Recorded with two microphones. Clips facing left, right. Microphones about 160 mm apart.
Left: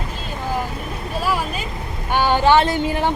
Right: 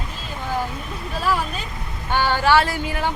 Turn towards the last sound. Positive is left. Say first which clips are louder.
# left 5 dB
turn(degrees=25)  # may be behind; listen again after turning